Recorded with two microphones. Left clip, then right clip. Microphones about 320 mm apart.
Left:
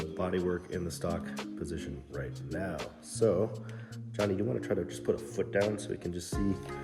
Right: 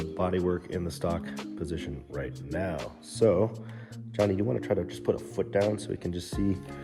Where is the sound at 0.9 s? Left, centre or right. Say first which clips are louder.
Right 4 dB; centre.